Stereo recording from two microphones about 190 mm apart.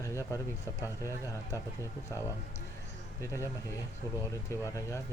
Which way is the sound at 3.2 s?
15° left (ahead or behind).